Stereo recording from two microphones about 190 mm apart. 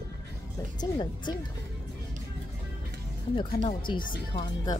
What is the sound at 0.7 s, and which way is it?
Speech, 20° left (ahead or behind).